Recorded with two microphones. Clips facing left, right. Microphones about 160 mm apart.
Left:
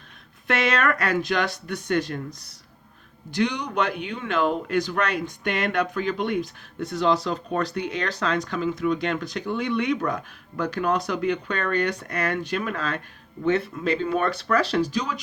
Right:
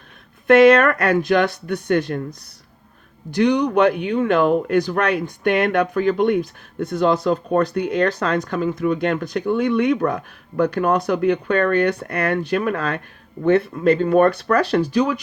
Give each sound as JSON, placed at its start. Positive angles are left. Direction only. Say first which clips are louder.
{"t": 0.4, "sound": "speech", "louder": "right 12 dB", "side_deg": -55}
{"t": 3.3, "sound": "speech", "louder": "right 8 dB", "side_deg": -55}